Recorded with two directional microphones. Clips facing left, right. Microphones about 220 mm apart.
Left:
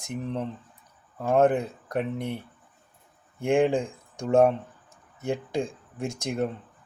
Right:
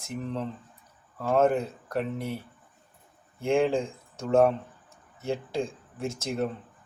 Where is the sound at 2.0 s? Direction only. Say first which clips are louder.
Left 1 dB; 5° right (ahead or behind).